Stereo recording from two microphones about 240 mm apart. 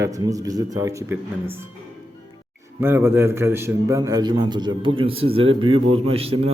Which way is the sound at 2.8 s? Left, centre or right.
Centre.